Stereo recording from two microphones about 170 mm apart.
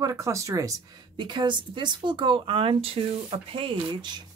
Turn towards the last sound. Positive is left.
turn(degrees=-25)  # may be behind; listen again after turning